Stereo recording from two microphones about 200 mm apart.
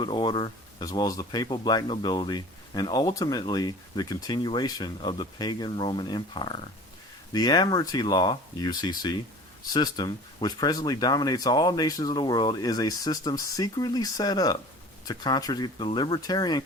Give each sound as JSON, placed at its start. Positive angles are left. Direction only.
{"t": 0.0, "sound": "speech", "side_deg": 25}